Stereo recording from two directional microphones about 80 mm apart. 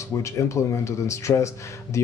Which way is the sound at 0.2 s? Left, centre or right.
Left.